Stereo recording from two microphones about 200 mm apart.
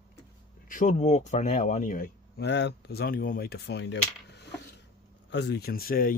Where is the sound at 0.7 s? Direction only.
40° left (ahead or behind).